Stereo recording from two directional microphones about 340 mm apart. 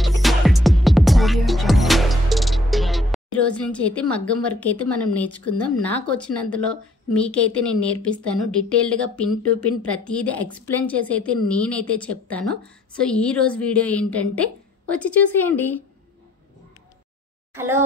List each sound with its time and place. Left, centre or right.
0.0 s music: centre
3.3 s a woman's voice: centre
17.6 s speech: centre